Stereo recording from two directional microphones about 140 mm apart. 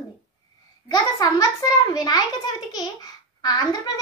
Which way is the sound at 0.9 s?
25° left (ahead or behind).